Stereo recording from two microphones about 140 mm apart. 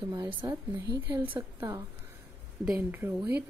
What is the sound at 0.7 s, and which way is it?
Speech, 15° right (ahead or behind).